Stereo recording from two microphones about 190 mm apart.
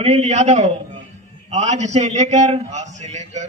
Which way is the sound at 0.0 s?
35° right (ahead or behind).